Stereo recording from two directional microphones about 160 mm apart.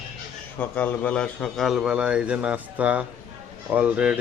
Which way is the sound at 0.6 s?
10° left (ahead or behind).